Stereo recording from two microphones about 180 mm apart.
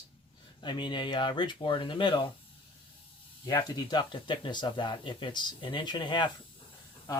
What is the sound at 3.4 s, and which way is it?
Speech, 20° left (ahead or behind).